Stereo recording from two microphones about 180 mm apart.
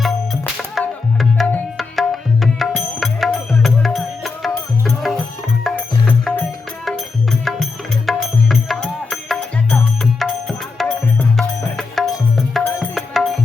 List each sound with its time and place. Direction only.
0.8 s tabla: centre (ahead or behind)
3.6 s music: centre (ahead or behind)
7.4 s music: centre (ahead or behind)